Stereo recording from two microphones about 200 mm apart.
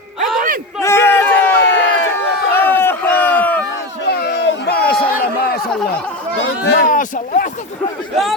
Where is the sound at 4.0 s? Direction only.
55° left (ahead or behind).